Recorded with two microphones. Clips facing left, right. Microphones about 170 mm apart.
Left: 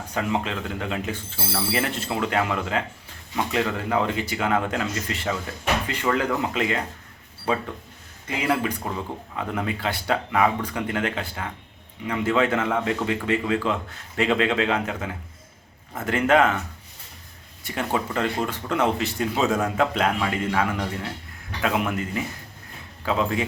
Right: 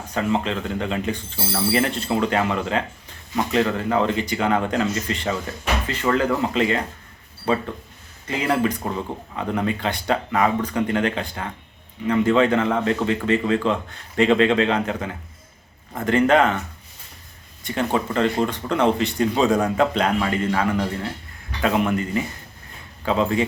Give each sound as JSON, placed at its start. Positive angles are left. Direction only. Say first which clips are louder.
{"t": 0.1, "sound": "a man's voice", "louder": "right 4 dB", "side_deg": 10}
{"t": 17.6, "sound": "speech", "louder": "right 4 dB", "side_deg": 5}